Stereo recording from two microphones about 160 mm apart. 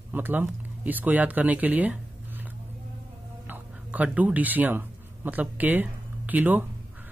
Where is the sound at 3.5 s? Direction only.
10° right (ahead or behind).